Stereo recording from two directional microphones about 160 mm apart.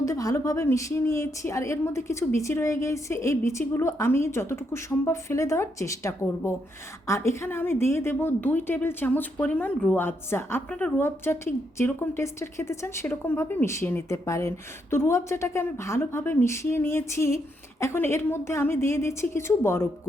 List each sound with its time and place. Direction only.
0.0 s a woman's voice: 20° left (ahead or behind)